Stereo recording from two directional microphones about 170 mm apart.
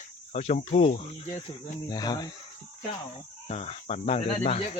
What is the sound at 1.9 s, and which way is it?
Speech, 25° left (ahead or behind).